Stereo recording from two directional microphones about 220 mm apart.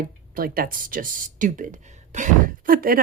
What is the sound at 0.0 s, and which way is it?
Speech, 40° right (ahead or behind).